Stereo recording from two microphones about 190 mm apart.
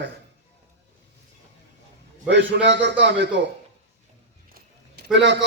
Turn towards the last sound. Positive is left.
turn(degrees=-70)  # may be behind; listen again after turning